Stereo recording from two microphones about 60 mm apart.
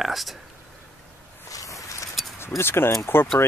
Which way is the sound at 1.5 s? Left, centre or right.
Left.